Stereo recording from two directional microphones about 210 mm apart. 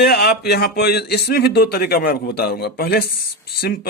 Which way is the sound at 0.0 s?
50° left (ahead or behind).